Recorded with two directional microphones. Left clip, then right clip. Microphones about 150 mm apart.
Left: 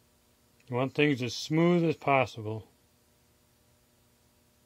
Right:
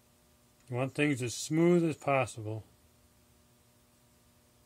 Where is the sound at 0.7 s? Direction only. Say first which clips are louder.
Left 4 dB; 50° left (ahead or behind).